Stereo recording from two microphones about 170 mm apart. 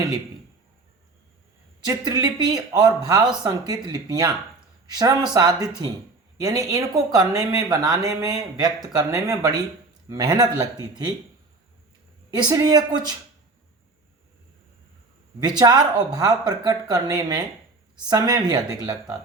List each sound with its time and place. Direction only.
1.9 s speech: 20° right (ahead or behind)
12.3 s speech: 25° right (ahead or behind)
15.4 s speech: 25° right (ahead or behind)